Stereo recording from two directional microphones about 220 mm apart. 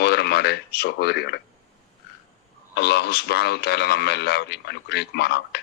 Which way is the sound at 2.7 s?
50° left (ahead or behind).